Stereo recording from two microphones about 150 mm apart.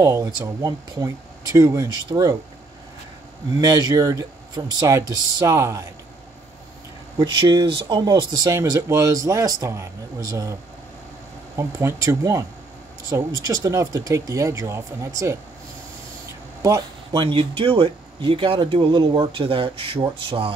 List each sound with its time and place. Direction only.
0.0 s speech: 25° right (ahead or behind)
3.6 s speech: 25° right (ahead or behind)
7.2 s speech: 30° right (ahead or behind)
11.5 s speech: 20° right (ahead or behind)
16.6 s speech: 25° right (ahead or behind)